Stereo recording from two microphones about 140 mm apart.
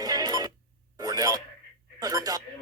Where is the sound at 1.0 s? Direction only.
25° right (ahead or behind).